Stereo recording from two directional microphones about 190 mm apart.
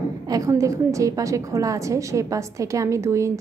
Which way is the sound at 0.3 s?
15° right (ahead or behind).